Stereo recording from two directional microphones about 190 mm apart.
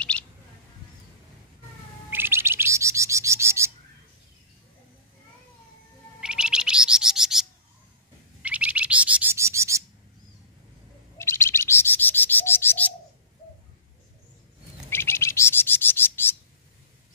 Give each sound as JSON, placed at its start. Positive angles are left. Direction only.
{"t": 0.1, "sound": "bird", "side_deg": 5}
{"t": 2.0, "sound": "bird", "side_deg": -10}
{"t": 6.2, "sound": "bird", "side_deg": -5}
{"t": 11.1, "sound": "bird", "side_deg": 15}
{"t": 14.9, "sound": "bird", "side_deg": 10}